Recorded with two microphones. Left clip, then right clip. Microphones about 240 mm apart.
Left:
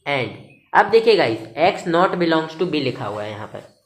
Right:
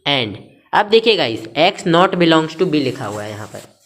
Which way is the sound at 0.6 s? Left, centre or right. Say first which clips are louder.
Right 1 dB; right.